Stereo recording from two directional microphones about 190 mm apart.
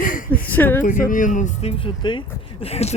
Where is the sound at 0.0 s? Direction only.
45° left (ahead or behind).